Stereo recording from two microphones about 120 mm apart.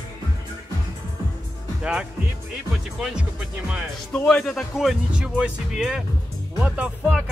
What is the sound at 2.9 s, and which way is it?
Speech, 5° right (ahead or behind).